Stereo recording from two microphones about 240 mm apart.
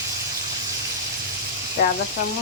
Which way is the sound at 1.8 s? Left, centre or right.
Left.